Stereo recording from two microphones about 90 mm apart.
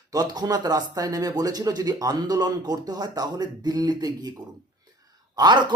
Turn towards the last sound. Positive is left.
turn(degrees=-55)  # may be behind; listen again after turning